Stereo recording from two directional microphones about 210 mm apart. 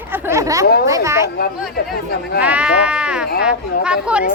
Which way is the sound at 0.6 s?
45° left (ahead or behind).